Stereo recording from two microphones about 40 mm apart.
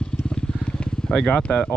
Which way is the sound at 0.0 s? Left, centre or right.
Left.